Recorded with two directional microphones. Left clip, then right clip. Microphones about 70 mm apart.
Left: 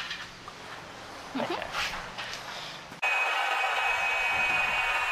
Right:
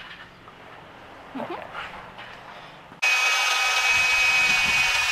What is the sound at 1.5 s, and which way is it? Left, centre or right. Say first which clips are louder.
Dog: left 3 dB; left.